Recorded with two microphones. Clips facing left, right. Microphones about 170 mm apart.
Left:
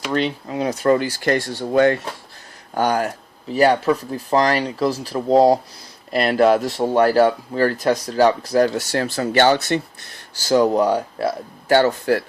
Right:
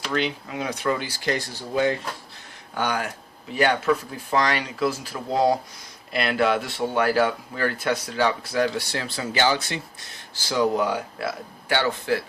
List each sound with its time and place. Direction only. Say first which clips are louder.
0.1 s speech: left 4 dB; 35° left (ahead or behind); by 2.0 s 65° left (ahead or behind)
2.7 s speech: left 7 dB; 40° left (ahead or behind); by 9.8 s 60° left (ahead or behind)
10.4 s speech: left 6 dB; 45° left (ahead or behind)